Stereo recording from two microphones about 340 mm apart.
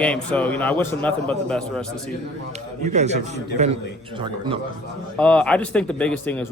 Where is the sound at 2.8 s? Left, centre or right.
Centre.